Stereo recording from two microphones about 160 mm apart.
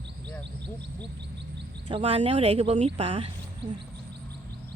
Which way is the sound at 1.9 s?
40° right (ahead or behind).